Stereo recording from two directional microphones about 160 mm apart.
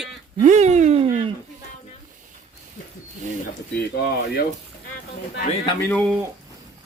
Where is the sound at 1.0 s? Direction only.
35° right (ahead or behind).